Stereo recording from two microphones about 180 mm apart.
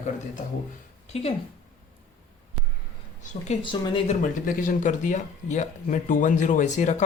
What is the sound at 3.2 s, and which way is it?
Speech, 35° left (ahead or behind).